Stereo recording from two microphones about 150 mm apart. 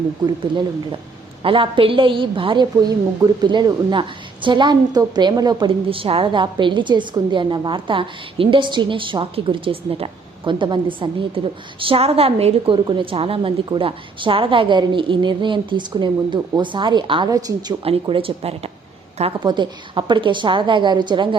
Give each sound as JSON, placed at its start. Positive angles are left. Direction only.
{"t": 1.4, "sound": "a woman's voice", "side_deg": -35}
{"t": 17.8, "sound": "a woman's voice", "side_deg": -40}